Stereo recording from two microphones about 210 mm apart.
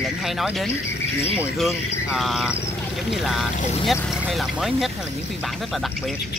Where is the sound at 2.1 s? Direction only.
Centre (ahead or behind).